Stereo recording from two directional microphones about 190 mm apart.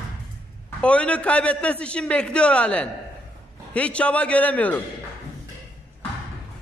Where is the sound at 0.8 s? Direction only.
5° left (ahead or behind).